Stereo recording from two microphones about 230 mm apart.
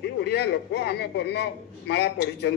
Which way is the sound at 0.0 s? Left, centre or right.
Left.